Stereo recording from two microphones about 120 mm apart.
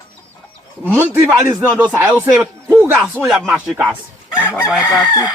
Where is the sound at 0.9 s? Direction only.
15° right (ahead or behind).